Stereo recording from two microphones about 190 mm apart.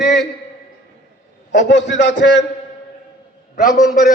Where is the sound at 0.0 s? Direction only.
60° left (ahead or behind).